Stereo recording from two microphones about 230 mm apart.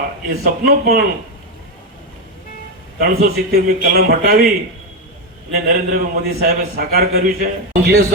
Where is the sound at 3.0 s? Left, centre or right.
Right.